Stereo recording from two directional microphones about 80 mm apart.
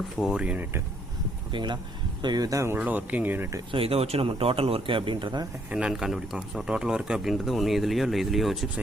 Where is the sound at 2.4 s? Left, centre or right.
Right.